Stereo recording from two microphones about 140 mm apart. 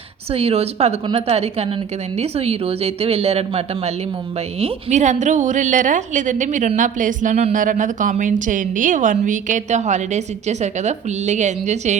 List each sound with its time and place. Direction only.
0.3 s a woman's voice: 45° right (ahead or behind)